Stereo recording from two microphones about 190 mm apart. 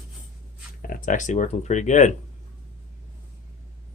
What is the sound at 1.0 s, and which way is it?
Speech, 40° left (ahead or behind).